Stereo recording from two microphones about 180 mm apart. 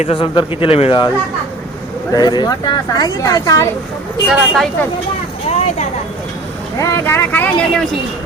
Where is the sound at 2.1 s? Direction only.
25° left (ahead or behind).